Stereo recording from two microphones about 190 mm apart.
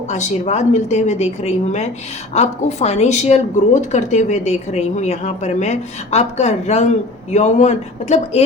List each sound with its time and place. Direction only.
0.1 s a woman's voice: 40° left (ahead or behind)